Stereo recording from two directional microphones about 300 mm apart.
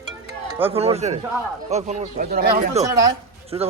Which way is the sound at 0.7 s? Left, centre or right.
Centre.